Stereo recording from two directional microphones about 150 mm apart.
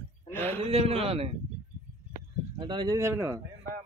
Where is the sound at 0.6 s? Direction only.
45° right (ahead or behind).